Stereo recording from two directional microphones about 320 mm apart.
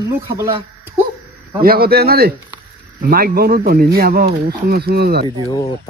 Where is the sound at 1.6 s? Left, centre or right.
Right.